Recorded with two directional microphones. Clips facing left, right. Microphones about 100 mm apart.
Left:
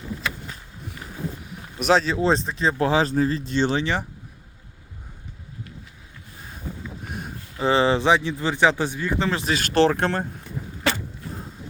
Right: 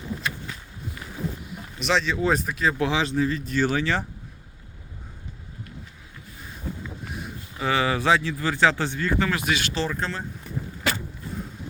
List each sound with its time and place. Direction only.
1.8 s speech: 40° left (ahead or behind); by 4.0 s 20° left (ahead or behind)
7.6 s speech: 30° left (ahead or behind)
9.7 s speech: 60° left (ahead or behind)